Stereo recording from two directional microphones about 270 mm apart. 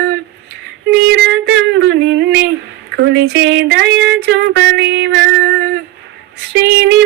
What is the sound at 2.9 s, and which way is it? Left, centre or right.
Speech, right.